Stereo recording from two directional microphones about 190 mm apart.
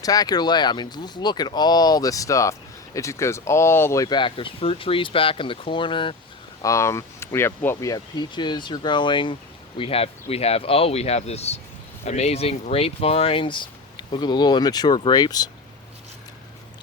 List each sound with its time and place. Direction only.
0.0 s speech: 20° left (ahead or behind)
6.6 s speech: 15° left (ahead or behind)